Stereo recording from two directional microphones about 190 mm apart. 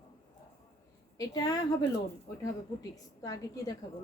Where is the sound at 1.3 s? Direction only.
20° left (ahead or behind).